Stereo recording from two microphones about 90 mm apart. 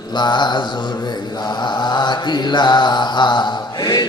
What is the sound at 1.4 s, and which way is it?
Mantra, 55° left (ahead or behind).